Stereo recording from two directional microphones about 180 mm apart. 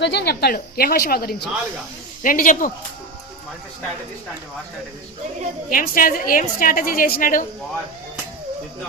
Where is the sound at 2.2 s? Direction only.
50° left (ahead or behind).